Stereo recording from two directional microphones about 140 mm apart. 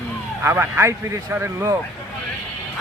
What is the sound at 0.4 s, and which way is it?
Speech, 20° right (ahead or behind).